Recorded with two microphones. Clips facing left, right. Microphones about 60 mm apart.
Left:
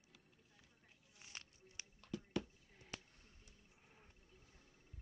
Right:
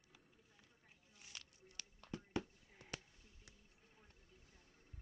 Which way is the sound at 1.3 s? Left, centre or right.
Left.